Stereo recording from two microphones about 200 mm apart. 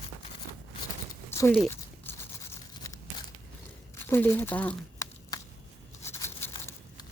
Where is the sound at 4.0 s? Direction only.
10° left (ahead or behind).